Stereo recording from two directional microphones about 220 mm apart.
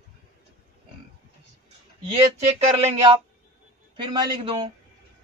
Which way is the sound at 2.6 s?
30° right (ahead or behind).